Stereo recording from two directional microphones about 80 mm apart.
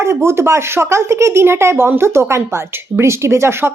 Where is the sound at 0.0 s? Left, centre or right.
Right.